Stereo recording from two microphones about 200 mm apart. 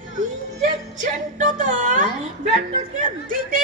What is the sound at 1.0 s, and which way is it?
Speech, 40° right (ahead or behind).